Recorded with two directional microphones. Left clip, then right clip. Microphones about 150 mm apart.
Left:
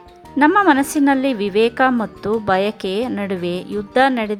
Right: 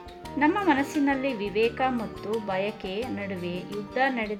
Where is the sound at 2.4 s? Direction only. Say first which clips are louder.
Left 11 dB; 45° left (ahead or behind).